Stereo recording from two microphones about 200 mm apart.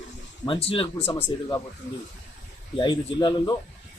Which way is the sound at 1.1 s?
10° left (ahead or behind).